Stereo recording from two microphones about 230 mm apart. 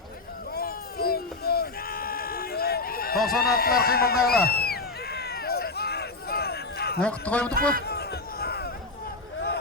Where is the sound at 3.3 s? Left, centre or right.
Left.